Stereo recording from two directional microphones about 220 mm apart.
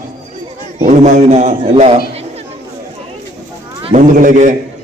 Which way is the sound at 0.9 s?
30° right (ahead or behind).